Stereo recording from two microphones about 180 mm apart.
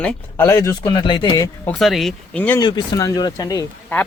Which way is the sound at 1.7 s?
Centre (ahead or behind).